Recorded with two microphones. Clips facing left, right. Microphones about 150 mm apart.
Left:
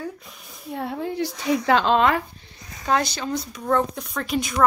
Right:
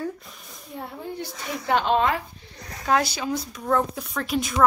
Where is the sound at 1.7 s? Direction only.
90° left.